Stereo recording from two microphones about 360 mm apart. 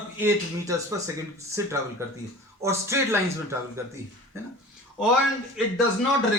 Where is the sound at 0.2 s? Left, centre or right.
Centre.